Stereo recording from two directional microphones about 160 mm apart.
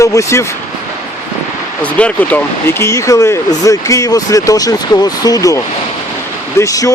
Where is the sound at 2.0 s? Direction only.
10° left (ahead or behind).